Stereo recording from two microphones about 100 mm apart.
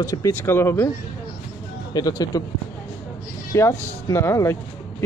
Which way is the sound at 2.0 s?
40° left (ahead or behind).